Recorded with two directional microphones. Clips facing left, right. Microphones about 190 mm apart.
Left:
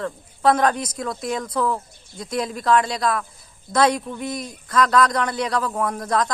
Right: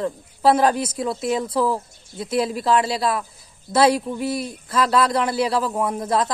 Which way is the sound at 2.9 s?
30° right (ahead or behind).